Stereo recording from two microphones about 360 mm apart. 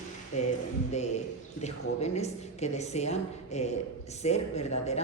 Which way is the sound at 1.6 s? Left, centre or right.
Centre.